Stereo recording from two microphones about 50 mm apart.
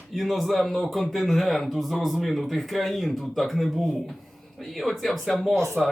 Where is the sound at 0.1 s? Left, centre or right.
Centre.